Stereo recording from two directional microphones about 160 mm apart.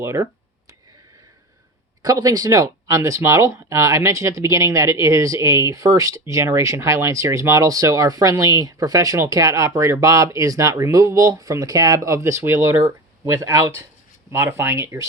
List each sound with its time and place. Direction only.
0.0 s speech: 15° right (ahead or behind)
2.0 s speech: 20° right (ahead or behind)